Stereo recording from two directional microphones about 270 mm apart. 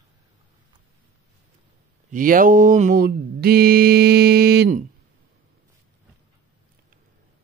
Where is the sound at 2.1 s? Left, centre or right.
Right.